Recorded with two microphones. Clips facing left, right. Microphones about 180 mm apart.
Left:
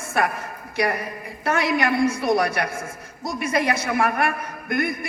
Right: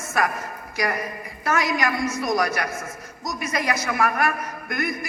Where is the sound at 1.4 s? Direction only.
30° left (ahead or behind).